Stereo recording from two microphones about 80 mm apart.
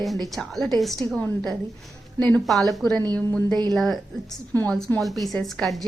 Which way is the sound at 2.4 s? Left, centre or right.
Centre.